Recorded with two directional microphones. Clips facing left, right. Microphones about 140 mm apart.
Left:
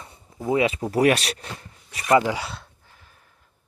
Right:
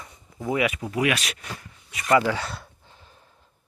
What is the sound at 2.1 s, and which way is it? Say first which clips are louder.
Speech: left 1 dB; 15° left (ahead or behind).